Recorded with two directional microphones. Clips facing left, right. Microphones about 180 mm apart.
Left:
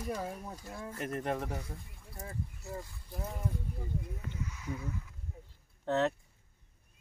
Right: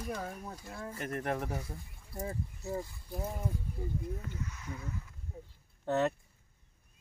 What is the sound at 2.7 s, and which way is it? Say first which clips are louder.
Speech: right 5 dB; 15° right (ahead or behind).